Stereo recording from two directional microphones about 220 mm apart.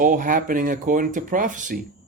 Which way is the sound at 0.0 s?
35° right (ahead or behind).